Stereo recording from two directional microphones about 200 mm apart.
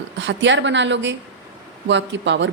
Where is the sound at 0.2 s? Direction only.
65° right (ahead or behind).